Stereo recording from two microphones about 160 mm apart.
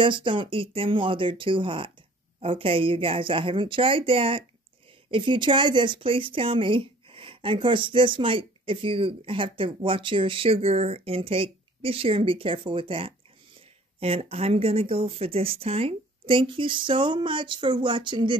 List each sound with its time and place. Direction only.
0.0 s a woman's voice: 30° right (ahead or behind)